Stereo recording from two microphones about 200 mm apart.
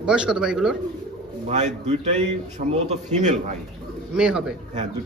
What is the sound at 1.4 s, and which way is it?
A man's voice, 35° right (ahead or behind).